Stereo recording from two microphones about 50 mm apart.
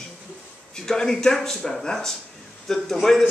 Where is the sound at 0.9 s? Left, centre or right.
Centre.